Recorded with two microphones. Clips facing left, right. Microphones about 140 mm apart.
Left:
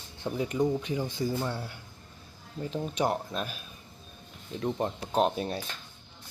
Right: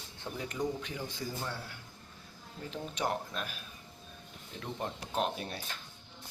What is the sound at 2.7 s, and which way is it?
Speech, 15° left (ahead or behind).